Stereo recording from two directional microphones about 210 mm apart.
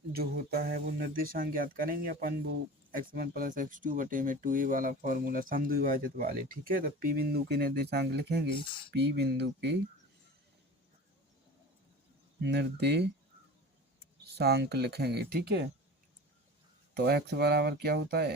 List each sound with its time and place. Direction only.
0.1 s speech: 45° right (ahead or behind)
12.4 s speech: 55° right (ahead or behind)
14.3 s speech: 50° right (ahead or behind)
17.0 s speech: 50° right (ahead or behind)